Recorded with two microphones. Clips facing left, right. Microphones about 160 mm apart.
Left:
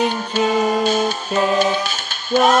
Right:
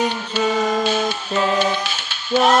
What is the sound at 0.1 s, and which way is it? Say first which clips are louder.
Music: left 2 dB; 45° left (ahead or behind).